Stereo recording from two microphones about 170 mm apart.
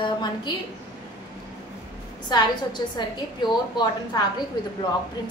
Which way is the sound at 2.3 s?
25° left (ahead or behind).